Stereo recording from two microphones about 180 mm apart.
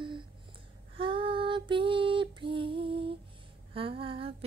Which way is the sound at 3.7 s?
30° right (ahead or behind).